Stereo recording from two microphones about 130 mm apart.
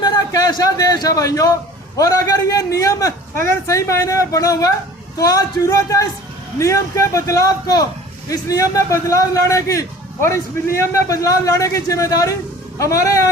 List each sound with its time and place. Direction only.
0.0 s a man's voice: 30° left (ahead or behind)